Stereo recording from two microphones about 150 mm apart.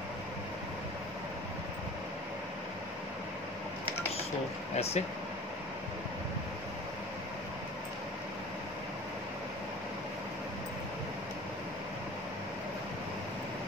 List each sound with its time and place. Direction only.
4.7 s speech: 45° left (ahead or behind)